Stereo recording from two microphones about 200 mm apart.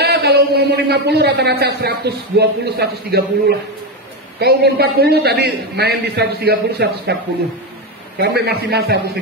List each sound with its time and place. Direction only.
0.0 s a sound: 55° right (ahead or behind)
0.8 s a man's voice: 55° right (ahead or behind)
8.2 s a man's voice: 55° right (ahead or behind)